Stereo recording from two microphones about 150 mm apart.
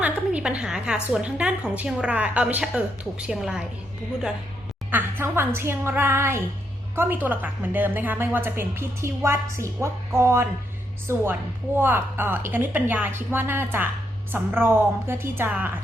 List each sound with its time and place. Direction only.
0.0 s a sound: 10° right (ahead or behind)
1.0 s a woman's voice: 5° right (ahead or behind)
4.9 s a woman's voice: 15° right (ahead or behind)